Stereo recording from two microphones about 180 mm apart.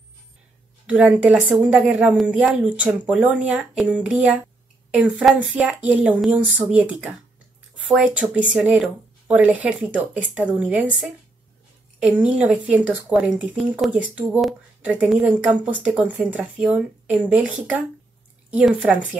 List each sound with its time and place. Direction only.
0.8 s speech: 10° right (ahead or behind)